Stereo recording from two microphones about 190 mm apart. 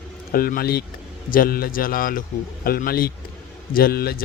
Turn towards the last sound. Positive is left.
turn(degrees=55)  # may be behind; listen again after turning